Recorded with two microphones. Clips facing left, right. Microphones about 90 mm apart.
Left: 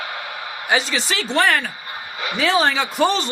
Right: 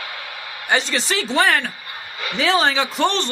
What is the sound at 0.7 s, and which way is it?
Speech, centre (ahead or behind).